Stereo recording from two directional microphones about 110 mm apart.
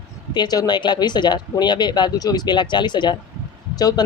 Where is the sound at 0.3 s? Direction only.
35° left (ahead or behind).